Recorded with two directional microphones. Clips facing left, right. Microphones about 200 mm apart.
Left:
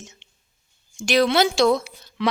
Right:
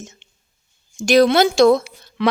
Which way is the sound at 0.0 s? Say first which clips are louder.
Right 6 dB; 45° right (ahead or behind).